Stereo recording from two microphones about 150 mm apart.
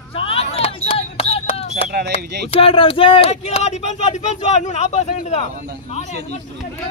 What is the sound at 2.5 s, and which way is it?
Speech, 40° left (ahead or behind).